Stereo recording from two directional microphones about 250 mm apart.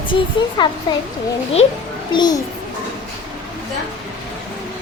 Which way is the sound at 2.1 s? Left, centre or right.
Centre.